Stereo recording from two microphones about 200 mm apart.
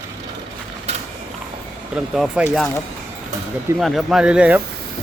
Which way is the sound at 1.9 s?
5° right (ahead or behind).